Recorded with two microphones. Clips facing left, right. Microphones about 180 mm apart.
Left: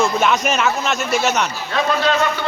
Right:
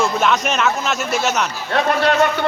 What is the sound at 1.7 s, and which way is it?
Speech, 60° right (ahead or behind).